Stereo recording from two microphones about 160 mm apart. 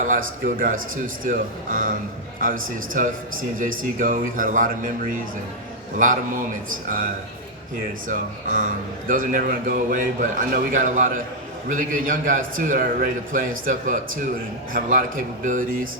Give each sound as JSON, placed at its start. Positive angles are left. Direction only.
{"t": 0.0, "sound": "a man's voice", "side_deg": -55}
{"t": 8.0, "sound": "a man's voice", "side_deg": -55}